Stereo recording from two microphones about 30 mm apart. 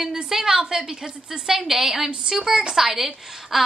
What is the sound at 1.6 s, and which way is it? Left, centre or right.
A woman's voice, centre.